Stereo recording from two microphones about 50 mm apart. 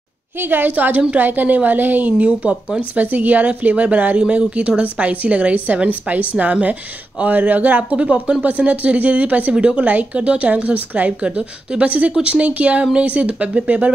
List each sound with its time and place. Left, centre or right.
0.4 s a woman's voice: right